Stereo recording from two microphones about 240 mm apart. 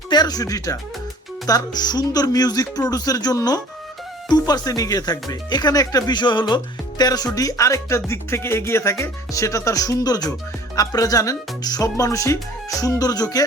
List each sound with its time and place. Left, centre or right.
0.1 s speech: centre